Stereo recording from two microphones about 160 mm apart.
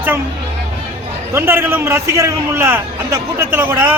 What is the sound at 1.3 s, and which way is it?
A man's voice, 15° right (ahead or behind).